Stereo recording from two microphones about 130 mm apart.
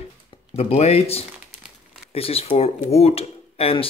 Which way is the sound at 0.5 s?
50° left (ahead or behind).